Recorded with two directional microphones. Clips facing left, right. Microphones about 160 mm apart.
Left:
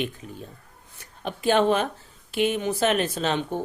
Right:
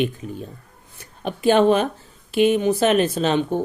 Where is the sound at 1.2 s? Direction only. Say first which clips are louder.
Right 5 dB; 15° right (ahead or behind).